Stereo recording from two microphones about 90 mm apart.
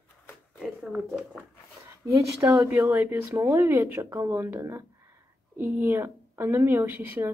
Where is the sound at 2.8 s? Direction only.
20° right (ahead or behind).